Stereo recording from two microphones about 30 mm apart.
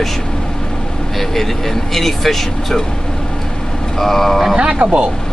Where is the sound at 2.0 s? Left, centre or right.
Centre.